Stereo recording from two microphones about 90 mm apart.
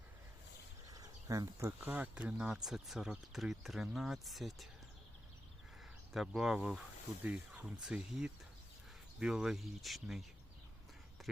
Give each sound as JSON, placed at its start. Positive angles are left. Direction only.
{"t": 0.9, "sound": "a sound", "side_deg": -45}
{"t": 1.8, "sound": "speech", "side_deg": -20}
{"t": 6.1, "sound": "speech", "side_deg": -5}